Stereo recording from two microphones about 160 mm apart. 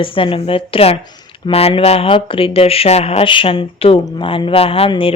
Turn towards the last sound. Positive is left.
turn(degrees=35)  # may be behind; listen again after turning